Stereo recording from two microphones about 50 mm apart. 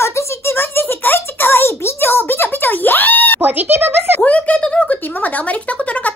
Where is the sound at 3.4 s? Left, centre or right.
Right.